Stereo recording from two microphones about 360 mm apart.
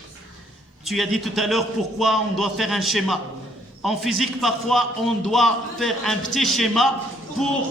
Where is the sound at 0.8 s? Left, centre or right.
Centre.